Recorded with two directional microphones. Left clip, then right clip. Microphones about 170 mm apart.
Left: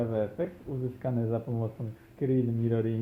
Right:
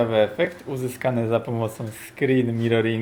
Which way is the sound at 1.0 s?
25° right (ahead or behind).